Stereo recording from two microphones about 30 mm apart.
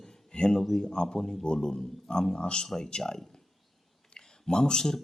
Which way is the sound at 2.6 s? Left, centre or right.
Centre.